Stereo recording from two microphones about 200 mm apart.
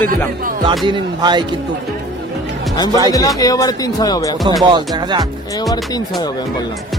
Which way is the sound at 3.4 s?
20° left (ahead or behind).